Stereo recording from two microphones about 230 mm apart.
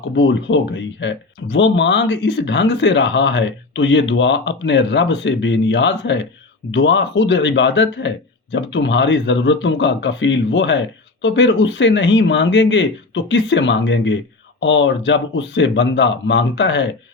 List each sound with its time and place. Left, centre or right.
0.2 s speech: left